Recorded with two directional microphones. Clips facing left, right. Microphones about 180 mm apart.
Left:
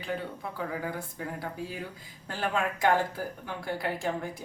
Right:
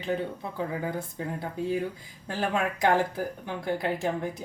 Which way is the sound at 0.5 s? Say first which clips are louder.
Right 3 dB; 25° right (ahead or behind).